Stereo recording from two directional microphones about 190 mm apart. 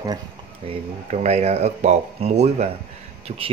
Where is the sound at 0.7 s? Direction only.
35° right (ahead or behind).